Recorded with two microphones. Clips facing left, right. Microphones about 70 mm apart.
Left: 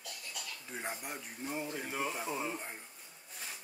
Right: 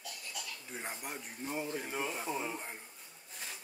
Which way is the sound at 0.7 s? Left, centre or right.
Centre.